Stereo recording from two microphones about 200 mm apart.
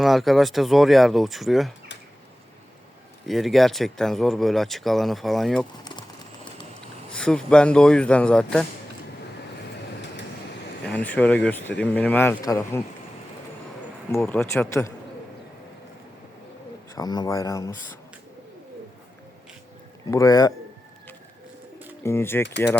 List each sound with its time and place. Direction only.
0.0 s speech: centre (ahead or behind)
3.2 s speech: centre (ahead or behind)
5.8 s music: 20° left (ahead or behind)
7.1 s speech: 5° left (ahead or behind)
10.8 s speech: 5° left (ahead or behind)
14.1 s speech: 10° left (ahead or behind)
16.9 s speech: 20° left (ahead or behind)
20.1 s speech: 15° left (ahead or behind)
22.0 s speech: 10° left (ahead or behind)
22.4 s speech: 60° left (ahead or behind)